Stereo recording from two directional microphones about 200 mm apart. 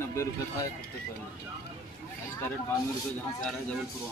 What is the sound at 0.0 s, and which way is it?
Music, 15° left (ahead or behind).